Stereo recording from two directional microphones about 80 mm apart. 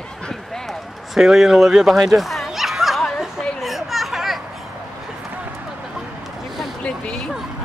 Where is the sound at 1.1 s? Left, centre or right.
Centre.